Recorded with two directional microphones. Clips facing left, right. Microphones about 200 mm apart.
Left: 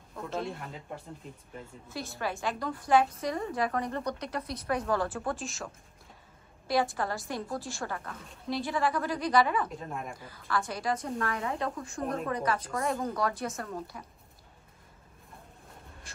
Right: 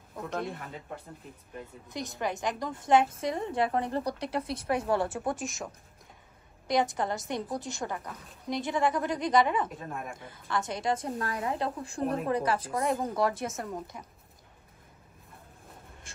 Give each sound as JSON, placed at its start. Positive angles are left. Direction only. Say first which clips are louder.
{"t": 0.5, "sound": "speech", "louder": "even", "side_deg": 0}
{"t": 1.9, "sound": "a woman's voice", "louder": "right 2 dB", "side_deg": -20}
{"t": 9.7, "sound": "speech", "louder": "even", "side_deg": -5}
{"t": 10.1, "sound": "a woman's voice", "louder": "even", "side_deg": -20}